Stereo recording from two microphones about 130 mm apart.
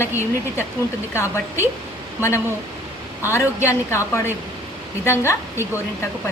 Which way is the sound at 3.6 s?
20° left (ahead or behind).